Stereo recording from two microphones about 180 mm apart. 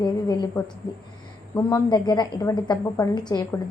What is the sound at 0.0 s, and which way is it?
A woman's voice, 20° left (ahead or behind).